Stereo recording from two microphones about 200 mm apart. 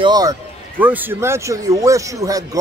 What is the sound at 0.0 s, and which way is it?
A man's voice, 20° right (ahead or behind).